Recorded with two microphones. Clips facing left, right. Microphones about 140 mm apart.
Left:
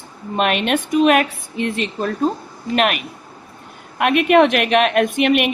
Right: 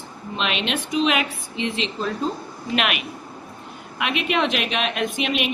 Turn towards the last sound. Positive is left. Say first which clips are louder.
# left 7 dB
turn(degrees=60)  # may be behind; listen again after turning